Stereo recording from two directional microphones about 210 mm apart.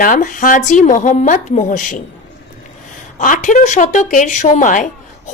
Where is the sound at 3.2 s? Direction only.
40° left (ahead or behind).